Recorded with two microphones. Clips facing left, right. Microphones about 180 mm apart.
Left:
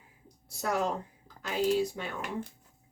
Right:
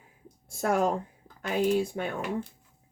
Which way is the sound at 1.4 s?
55° right (ahead or behind).